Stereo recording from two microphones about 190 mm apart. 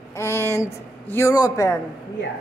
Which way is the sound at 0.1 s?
15° left (ahead or behind).